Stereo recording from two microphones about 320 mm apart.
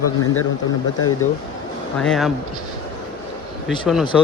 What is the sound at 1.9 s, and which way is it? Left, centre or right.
Speech, centre.